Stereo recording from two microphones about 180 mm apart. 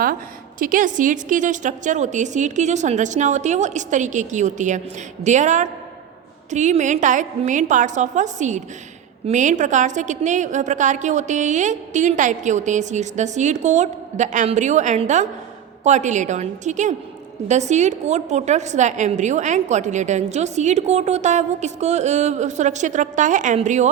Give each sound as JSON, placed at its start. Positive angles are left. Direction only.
{"t": 0.6, "sound": "a woman's voice", "side_deg": -45}